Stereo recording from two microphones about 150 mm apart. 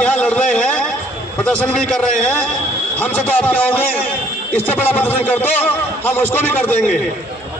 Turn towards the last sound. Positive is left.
turn(degrees=10)  # may be behind; listen again after turning